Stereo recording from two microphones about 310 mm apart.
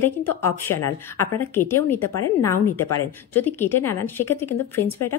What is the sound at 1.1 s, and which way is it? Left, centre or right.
Speech, centre.